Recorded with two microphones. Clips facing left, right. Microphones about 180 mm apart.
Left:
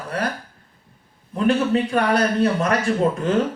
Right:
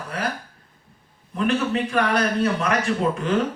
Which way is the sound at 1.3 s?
35° left (ahead or behind).